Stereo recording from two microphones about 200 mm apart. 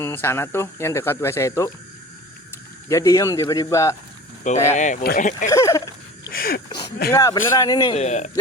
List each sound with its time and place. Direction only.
0.0 s speech: 10° left (ahead or behind)
2.9 s speech: 15° left (ahead or behind)
4.7 s speech: 35° left (ahead or behind)
5.5 s speech: 15° left (ahead or behind)
6.3 s a sound: 45° left (ahead or behind)
7.1 s speech: 15° left (ahead or behind)
7.9 s speech: 35° left (ahead or behind)